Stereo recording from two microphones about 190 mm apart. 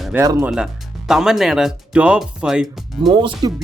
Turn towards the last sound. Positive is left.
turn(degrees=-20)  # may be behind; listen again after turning